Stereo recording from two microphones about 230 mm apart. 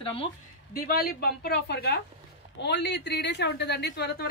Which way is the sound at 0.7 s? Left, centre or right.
Left.